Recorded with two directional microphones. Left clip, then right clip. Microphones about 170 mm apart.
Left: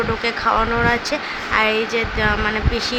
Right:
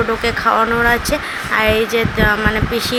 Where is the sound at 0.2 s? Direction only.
20° right (ahead or behind).